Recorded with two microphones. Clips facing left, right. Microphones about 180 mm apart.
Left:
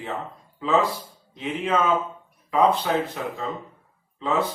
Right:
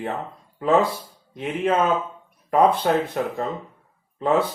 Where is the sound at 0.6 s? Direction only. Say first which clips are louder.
Right 3 dB; 55° right (ahead or behind).